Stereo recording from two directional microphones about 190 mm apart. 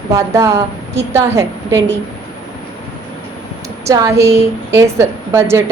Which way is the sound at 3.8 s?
15° right (ahead or behind).